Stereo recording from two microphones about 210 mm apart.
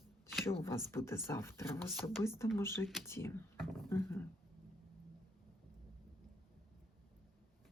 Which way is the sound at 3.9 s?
10° left (ahead or behind).